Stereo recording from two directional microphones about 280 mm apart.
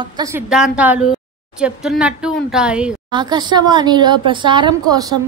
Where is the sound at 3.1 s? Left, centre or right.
Centre.